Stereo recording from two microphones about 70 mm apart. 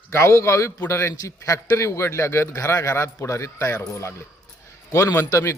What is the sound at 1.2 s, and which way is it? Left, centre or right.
Speech, left.